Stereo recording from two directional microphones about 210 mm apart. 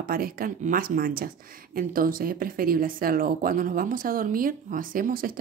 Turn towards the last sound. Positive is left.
turn(degrees=-40)  # may be behind; listen again after turning